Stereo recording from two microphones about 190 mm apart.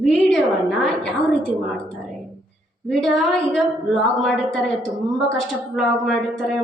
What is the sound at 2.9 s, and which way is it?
A woman's voice, centre (ahead or behind).